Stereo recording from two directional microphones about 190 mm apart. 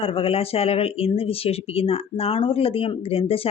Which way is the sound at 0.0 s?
30° left (ahead or behind).